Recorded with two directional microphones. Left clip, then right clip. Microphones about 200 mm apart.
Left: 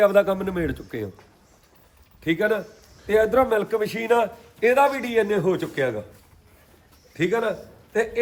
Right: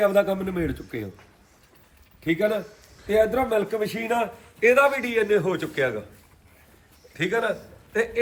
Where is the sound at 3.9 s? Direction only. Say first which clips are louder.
Left 7 dB; 35° left (ahead or behind).